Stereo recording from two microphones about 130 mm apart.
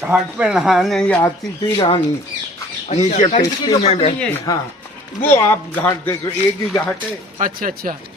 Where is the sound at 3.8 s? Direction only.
55° left (ahead or behind).